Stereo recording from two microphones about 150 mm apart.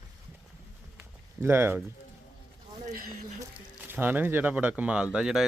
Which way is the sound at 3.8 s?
15° right (ahead or behind).